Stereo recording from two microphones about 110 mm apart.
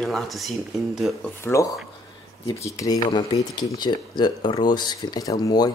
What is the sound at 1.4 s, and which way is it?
Speech, 25° left (ahead or behind).